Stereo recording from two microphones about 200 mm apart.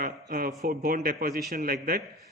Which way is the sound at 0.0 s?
45° right (ahead or behind).